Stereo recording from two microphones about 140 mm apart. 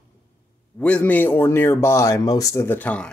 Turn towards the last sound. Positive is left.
turn(degrees=10)  # may be behind; listen again after turning